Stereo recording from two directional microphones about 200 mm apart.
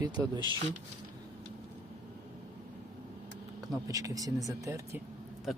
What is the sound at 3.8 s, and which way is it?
Speech, 15° right (ahead or behind).